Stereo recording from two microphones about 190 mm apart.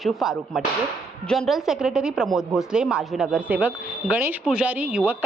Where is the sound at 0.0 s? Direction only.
Centre (ahead or behind).